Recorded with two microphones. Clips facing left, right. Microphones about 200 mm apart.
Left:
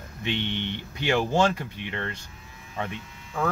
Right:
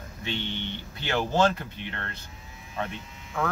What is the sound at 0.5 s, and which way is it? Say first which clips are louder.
Speech: left 3 dB; 15° left (ahead or behind).